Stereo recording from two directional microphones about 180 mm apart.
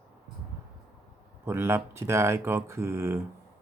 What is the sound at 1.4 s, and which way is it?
Speech, 15° right (ahead or behind).